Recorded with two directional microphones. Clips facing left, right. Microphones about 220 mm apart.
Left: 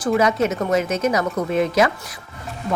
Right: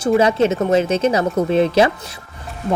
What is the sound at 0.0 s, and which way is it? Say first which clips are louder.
Speech: right 4 dB; 25° right (ahead or behind).